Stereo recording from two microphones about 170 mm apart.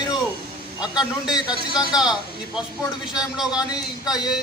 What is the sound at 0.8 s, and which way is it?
Speech, 5° right (ahead or behind).